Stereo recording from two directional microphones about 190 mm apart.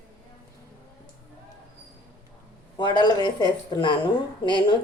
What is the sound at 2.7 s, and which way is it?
A woman's voice, 25° left (ahead or behind).